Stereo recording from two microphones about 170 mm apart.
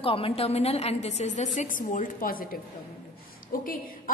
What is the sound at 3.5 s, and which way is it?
Speech, 55° left (ahead or behind).